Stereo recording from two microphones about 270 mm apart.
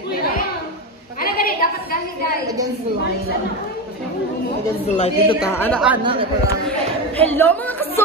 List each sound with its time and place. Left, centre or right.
1.2 s a sound: left
4.9 s a woman's voice: left
5.5 s a woman's voice: centre
7.2 s speech: centre